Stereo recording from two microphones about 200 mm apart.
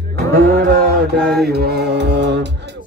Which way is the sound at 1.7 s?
60° right (ahead or behind).